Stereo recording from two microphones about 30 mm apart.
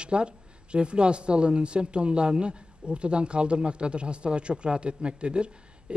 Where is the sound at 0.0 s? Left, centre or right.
Right.